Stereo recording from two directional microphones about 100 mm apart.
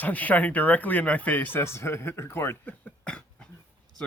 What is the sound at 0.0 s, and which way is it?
Speech, 15° left (ahead or behind).